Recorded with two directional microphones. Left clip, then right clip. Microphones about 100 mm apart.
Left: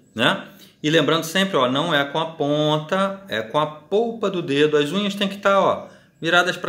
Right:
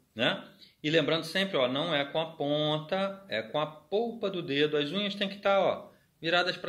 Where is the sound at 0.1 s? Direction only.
40° left (ahead or behind).